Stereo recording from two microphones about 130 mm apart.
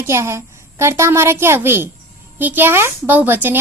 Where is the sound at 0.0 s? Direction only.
20° right (ahead or behind).